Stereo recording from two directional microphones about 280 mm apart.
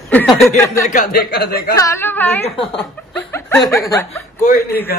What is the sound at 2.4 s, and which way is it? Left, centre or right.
Speech, centre.